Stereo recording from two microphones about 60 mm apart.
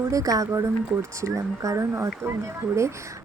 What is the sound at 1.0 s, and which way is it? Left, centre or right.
A woman's voice, right.